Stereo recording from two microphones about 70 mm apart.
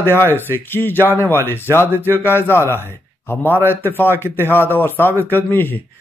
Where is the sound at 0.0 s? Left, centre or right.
Left.